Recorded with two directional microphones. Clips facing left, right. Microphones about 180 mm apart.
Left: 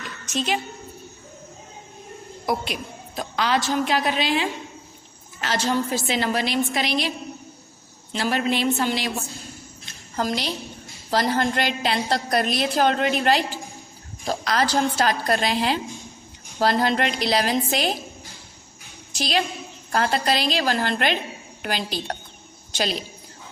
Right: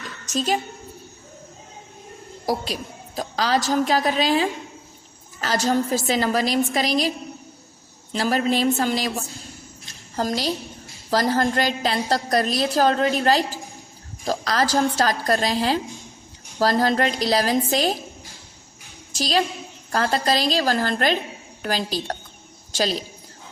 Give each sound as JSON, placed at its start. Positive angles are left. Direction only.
{"t": 0.3, "sound": "a woman's voice", "side_deg": -40}
{"t": 2.5, "sound": "a woman's voice", "side_deg": -35}
{"t": 8.1, "sound": "a woman's voice", "side_deg": -40}
{"t": 19.1, "sound": "a woman's voice", "side_deg": -40}